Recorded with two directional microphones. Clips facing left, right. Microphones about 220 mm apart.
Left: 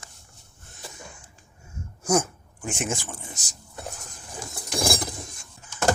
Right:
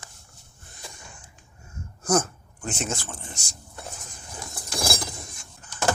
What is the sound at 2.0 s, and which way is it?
Speech, 10° left (ahead or behind).